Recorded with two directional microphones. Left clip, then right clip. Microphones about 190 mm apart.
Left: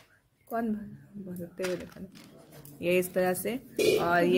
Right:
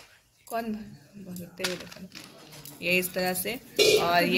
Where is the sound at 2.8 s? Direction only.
45° left (ahead or behind).